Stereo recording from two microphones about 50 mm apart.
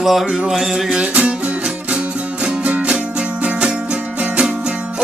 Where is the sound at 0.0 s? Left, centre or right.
Centre.